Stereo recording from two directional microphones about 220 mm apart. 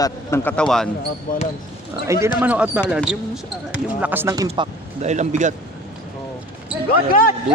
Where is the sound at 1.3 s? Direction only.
40° left (ahead or behind).